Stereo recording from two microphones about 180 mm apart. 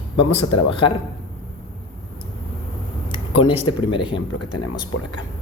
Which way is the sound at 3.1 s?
25° left (ahead or behind).